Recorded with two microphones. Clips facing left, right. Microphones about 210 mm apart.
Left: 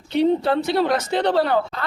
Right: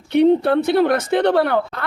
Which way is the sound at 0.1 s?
60° right (ahead or behind).